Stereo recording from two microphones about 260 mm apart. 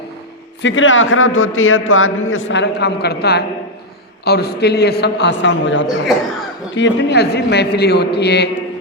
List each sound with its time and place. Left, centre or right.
0.6 s a man's voice: left